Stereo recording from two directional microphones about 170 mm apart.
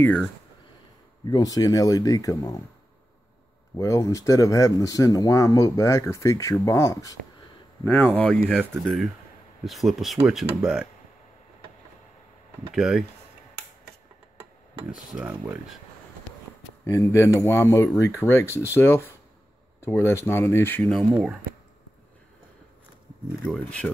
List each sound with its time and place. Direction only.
0.0 s speech: 5° left (ahead or behind)
1.3 s speech: 20° left (ahead or behind)
3.7 s speech: 20° left (ahead or behind); by 10.9 s 5° right (ahead or behind)
12.7 s speech: 5° right (ahead or behind)
14.9 s speech: 5° right (ahead or behind)
16.8 s speech: 15° left (ahead or behind)
23.4 s speech: 5° left (ahead or behind)